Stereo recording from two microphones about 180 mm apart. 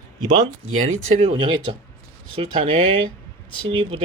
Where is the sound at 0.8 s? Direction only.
90° right.